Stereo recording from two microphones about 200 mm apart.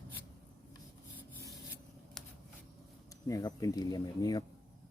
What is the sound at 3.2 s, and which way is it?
Speech, 15° left (ahead or behind).